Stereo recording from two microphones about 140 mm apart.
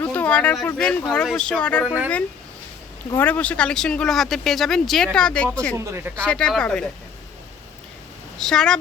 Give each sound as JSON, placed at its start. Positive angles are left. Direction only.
{"t": 0.0, "sound": "a sound", "side_deg": 10}
{"t": 0.8, "sound": "speech", "side_deg": 5}
{"t": 3.2, "sound": "speech", "side_deg": 10}
{"t": 5.7, "sound": "speech", "side_deg": -20}
{"t": 6.1, "sound": "speech", "side_deg": 5}
{"t": 8.4, "sound": "speech", "side_deg": 5}